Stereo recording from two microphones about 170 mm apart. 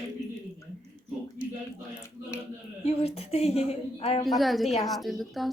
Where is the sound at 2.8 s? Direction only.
35° left (ahead or behind).